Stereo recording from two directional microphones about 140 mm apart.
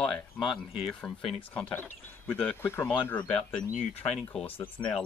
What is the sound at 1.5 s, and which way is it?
Speech, 10° left (ahead or behind).